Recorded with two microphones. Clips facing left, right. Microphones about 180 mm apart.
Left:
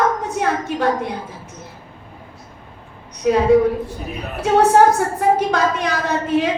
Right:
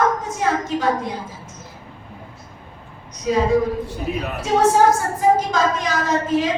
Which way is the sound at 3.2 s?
60° left (ahead or behind).